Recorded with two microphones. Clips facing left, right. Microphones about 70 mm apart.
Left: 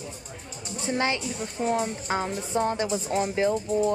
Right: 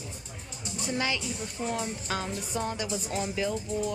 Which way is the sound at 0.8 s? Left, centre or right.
Left.